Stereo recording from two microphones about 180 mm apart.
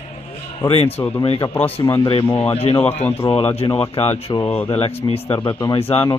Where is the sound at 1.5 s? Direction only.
10° left (ahead or behind).